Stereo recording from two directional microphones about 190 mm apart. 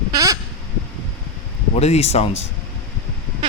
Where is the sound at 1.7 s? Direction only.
35° left (ahead or behind).